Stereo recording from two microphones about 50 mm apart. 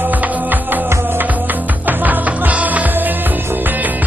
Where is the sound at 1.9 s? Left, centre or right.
Right.